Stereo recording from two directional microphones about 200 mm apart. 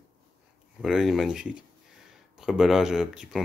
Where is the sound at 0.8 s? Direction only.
Centre (ahead or behind).